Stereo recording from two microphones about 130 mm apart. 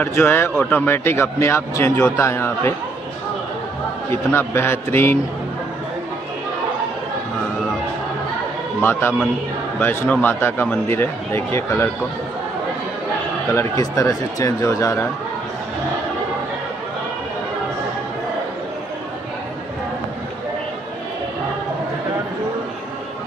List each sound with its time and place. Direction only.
0.0 s speech: 15° left (ahead or behind)
2.0 s speech: 10° left (ahead or behind)
2.2 s speech: 20° left (ahead or behind)
4.1 s speech: 15° left (ahead or behind)
9.8 s speech: 15° left (ahead or behind)
13.5 s speech: 20° left (ahead or behind)